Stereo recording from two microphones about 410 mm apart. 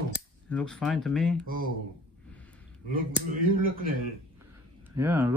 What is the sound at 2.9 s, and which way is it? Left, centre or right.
Speech, centre.